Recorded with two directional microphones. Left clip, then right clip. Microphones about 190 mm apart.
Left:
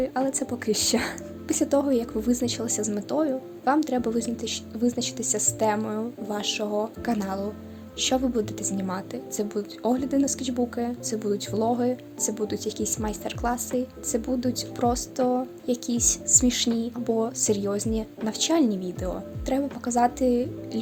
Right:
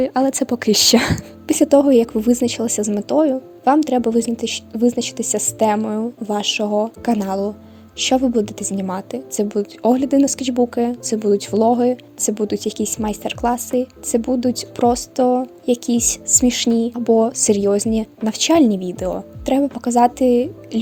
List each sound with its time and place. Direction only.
0.0 s a woman's voice: 50° right (ahead or behind)